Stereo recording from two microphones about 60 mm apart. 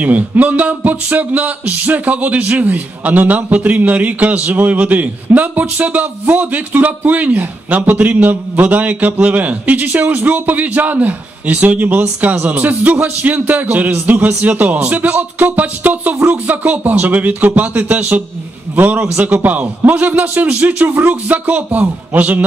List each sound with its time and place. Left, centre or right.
0.0 s a man's voice: right